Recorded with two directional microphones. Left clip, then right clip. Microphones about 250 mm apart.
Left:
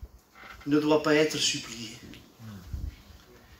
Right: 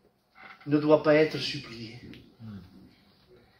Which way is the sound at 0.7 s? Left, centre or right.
Centre.